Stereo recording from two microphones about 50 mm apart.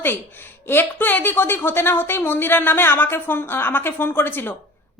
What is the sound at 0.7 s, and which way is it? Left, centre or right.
A woman's voice, left.